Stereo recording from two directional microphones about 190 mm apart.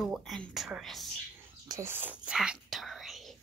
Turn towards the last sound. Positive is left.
turn(degrees=0)  # may be behind; listen again after turning